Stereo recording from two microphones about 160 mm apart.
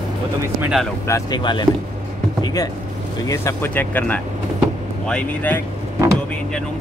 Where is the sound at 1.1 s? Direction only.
25° left (ahead or behind).